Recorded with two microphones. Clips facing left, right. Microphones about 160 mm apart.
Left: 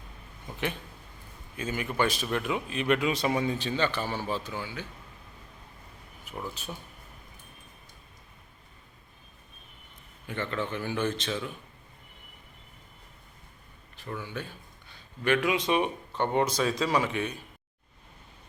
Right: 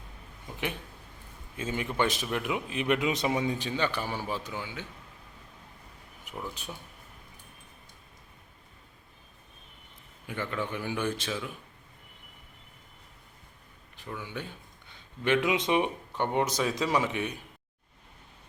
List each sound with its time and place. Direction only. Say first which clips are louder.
1.5 s a man's voice: even; 25° right (ahead or behind)
6.3 s a sound: left 1 dB; 15° right (ahead or behind)
10.2 s speech: left 1 dB; 10° right (ahead or behind)
13.9 s speech: left 2 dB; 15° right (ahead or behind)